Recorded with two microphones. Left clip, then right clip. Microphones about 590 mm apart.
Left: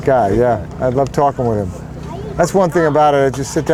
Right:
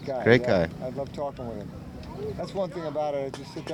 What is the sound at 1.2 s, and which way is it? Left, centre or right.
Speech, left.